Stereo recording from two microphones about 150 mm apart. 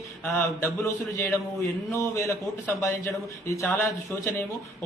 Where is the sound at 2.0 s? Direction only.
20° left (ahead or behind).